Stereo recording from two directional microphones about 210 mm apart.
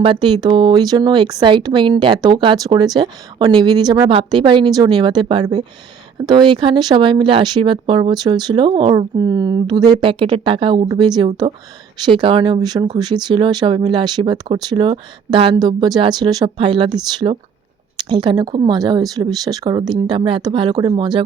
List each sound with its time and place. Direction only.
0.0 s speech: 25° right (ahead or behind)